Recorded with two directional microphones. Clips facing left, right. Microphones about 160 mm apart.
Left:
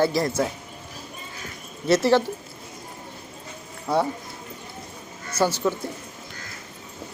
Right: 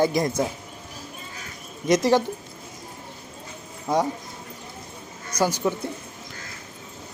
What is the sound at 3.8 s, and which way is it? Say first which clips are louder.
Speech: even; 15° right (ahead or behind).